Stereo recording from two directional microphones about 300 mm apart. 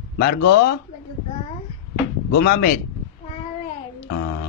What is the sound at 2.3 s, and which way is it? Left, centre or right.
Speech, left.